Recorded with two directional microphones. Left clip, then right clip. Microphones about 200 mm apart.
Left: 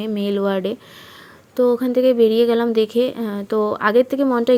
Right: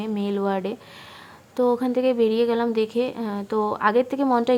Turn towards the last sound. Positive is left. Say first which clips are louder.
# left 4 dB
turn(degrees=10)  # may be behind; listen again after turning